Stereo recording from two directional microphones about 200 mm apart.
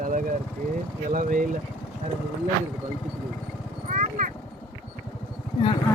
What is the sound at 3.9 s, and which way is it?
Vehicle, 40° right (ahead or behind).